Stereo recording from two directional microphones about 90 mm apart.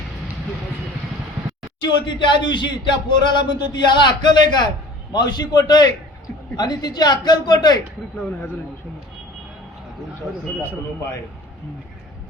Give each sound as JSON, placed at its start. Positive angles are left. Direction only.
{"t": 1.8, "sound": "a woman's voice", "side_deg": 60}